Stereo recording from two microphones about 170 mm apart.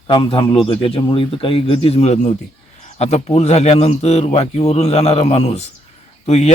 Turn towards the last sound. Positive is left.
turn(degrees=40)  # may be behind; listen again after turning